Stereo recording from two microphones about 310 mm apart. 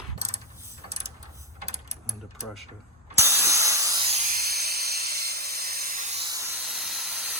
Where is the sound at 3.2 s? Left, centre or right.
Centre.